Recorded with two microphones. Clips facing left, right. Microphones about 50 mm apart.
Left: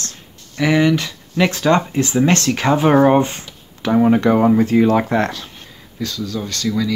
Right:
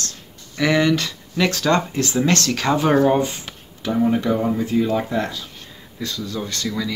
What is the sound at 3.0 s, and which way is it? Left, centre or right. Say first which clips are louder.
Speech: left 4 dB; left.